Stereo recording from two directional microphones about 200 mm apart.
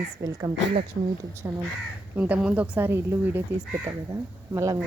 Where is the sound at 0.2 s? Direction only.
15° right (ahead or behind).